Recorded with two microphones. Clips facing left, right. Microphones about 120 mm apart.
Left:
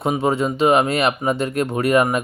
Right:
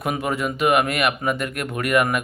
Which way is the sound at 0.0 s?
25° left (ahead or behind).